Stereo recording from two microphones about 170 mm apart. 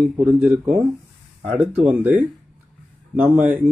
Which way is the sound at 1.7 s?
10° right (ahead or behind).